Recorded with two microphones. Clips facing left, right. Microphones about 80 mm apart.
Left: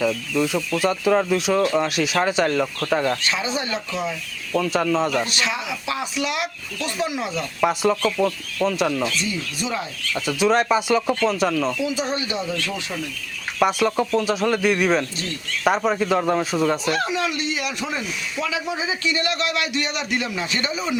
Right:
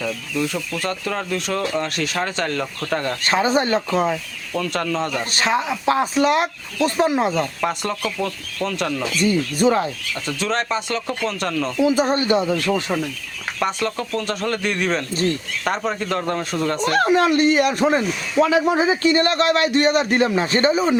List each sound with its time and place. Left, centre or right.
0.0 s speech: centre
3.2 s speech: right
4.5 s speech: centre
5.3 s speech: right
7.6 s speech: centre
9.2 s speech: right
10.2 s speech: centre
11.8 s speech: right
13.6 s speech: centre
16.8 s speech: right